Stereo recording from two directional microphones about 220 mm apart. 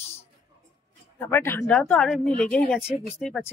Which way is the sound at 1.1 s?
10° left (ahead or behind).